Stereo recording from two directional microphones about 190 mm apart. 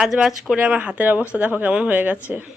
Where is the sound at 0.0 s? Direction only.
Centre (ahead or behind).